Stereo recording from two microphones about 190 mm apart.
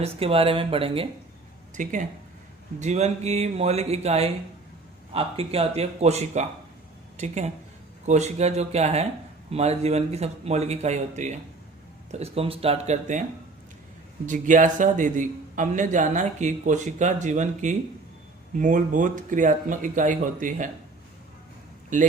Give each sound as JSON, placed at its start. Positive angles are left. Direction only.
{"t": 0.0, "sound": "speech", "side_deg": -30}
{"t": 1.7, "sound": "a man's voice", "side_deg": -40}
{"t": 14.3, "sound": "a man's voice", "side_deg": -45}